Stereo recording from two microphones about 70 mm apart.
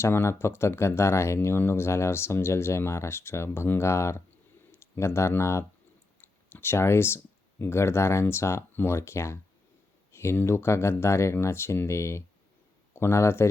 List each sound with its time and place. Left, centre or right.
0.0 s speech: left
6.2 s clicking: left
7.6 s a man's voice: left